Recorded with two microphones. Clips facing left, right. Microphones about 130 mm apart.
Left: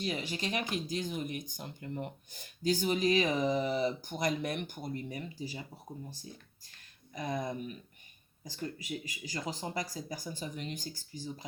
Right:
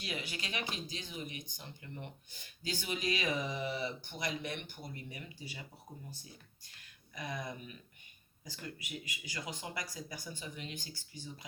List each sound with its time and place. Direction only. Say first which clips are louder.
0.0 s speech: left 7 dB; 35° left (ahead or behind)
7.1 s speech: left 6 dB; 35° left (ahead or behind)